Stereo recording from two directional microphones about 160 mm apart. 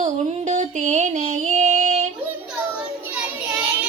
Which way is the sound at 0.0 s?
50° right (ahead or behind).